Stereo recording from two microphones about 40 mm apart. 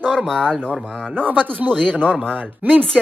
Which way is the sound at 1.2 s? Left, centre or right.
Right.